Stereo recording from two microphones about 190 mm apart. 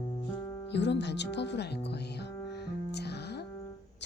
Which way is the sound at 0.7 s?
65° left (ahead or behind).